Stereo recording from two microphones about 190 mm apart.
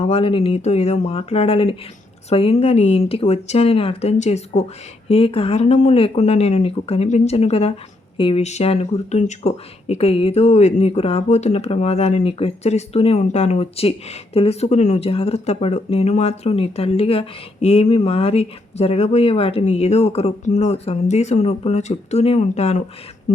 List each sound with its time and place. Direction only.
0.0 s speech: 30° left (ahead or behind)